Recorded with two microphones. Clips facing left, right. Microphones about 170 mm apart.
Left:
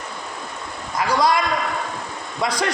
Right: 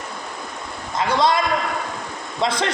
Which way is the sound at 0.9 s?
25° right (ahead or behind).